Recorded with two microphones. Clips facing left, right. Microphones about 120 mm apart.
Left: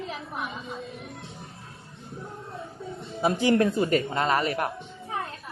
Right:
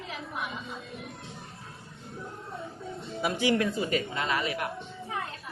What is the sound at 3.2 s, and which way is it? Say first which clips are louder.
Speech: left 5 dB; 40° left (ahead or behind).